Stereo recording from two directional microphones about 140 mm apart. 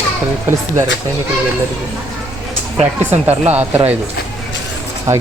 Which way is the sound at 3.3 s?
50° right (ahead or behind).